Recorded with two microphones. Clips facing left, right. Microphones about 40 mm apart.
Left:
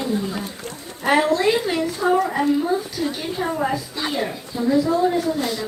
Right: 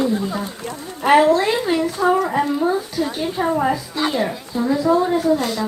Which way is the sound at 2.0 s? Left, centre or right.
Centre.